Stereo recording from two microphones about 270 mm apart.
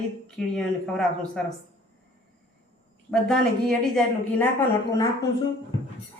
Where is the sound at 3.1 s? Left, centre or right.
Centre.